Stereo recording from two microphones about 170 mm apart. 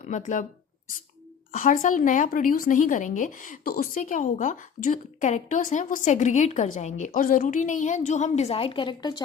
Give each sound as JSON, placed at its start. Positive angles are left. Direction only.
{"t": 0.0, "sound": "speech", "side_deg": 45}
{"t": 1.5, "sound": "speech", "side_deg": 50}